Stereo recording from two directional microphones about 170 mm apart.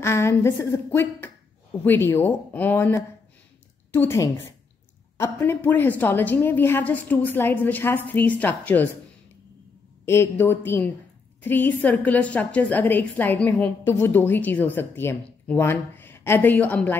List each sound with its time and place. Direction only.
0.0 s a woman's voice: 15° left (ahead or behind)
10.0 s a woman's voice: 15° left (ahead or behind)